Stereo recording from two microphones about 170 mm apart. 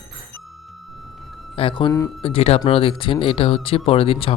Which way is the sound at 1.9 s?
20° left (ahead or behind).